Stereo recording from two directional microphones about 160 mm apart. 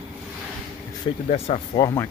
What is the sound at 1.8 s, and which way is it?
Speech, 20° left (ahead or behind).